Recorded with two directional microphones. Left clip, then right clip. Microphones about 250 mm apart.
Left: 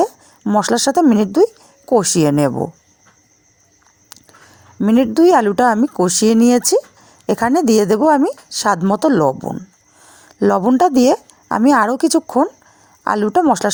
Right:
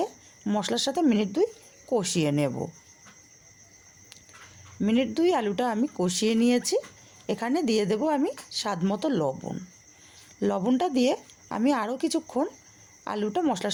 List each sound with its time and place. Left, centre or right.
0.0 s a woman's voice: left
4.8 s a woman's voice: left